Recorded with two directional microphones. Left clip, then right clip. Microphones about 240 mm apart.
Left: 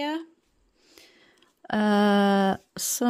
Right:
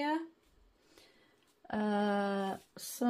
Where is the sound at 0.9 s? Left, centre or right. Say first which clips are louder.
Left 9 dB; left.